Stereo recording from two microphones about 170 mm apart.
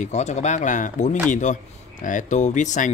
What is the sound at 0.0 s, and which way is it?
Speech, 40° left (ahead or behind).